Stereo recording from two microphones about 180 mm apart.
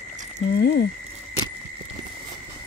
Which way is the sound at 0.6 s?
65° left (ahead or behind).